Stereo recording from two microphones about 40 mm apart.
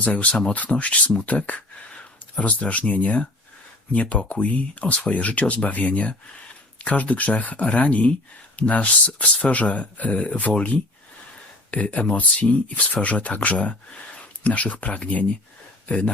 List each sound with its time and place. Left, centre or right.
0.0 s speech: left